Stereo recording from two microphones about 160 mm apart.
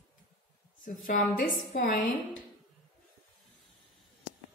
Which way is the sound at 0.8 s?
60° left (ahead or behind).